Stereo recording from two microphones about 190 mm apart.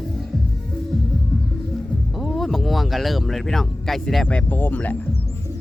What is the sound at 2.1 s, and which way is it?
Speech, centre (ahead or behind).